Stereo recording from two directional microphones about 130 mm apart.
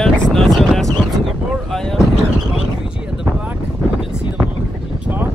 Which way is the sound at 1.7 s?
5° left (ahead or behind).